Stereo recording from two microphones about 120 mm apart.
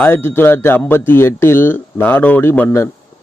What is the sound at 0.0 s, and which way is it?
Speech, 20° left (ahead or behind).